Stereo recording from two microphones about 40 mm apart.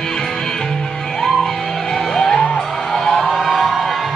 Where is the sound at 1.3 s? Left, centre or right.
Centre.